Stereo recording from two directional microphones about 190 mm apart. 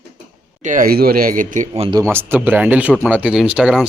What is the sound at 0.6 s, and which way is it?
Speech, 45° right (ahead or behind).